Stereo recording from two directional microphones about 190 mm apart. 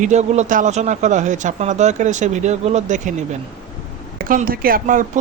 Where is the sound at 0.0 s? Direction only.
35° right (ahead or behind).